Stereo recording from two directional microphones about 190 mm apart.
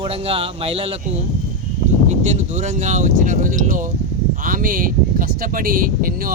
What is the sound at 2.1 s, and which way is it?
Speech, 40° right (ahead or behind).